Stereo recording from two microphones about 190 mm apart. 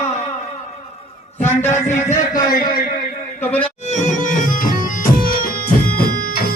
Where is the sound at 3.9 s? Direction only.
40° left (ahead or behind).